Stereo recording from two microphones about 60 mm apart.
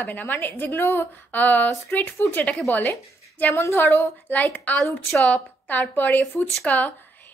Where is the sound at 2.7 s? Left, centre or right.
Left.